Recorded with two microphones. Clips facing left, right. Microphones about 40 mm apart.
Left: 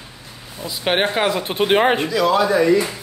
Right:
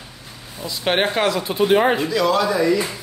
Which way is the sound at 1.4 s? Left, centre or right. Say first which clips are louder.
Even; left.